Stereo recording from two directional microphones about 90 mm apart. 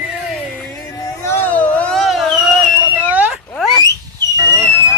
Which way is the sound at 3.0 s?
15° right (ahead or behind).